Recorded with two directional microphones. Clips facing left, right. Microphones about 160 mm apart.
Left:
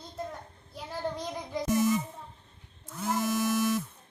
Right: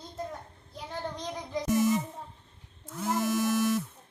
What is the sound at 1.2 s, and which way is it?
Music, 10° left (ahead or behind).